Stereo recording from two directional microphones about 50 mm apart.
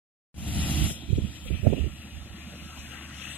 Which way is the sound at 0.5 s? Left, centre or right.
Left.